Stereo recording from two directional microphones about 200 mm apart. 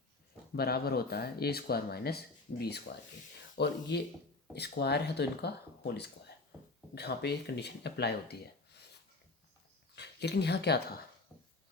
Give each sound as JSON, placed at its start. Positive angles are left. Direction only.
{"t": 0.5, "sound": "speech", "side_deg": 50}
{"t": 9.9, "sound": "speech", "side_deg": 55}